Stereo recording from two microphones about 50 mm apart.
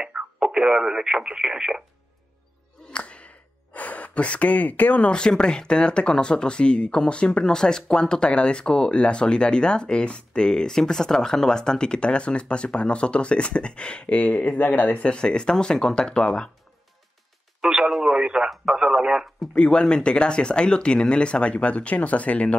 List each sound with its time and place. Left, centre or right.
0.0 s speech: centre
2.9 s gasp: left
5.4 s speech: centre
17.6 s speech: centre
19.1 s speech: centre
19.5 s speech: centre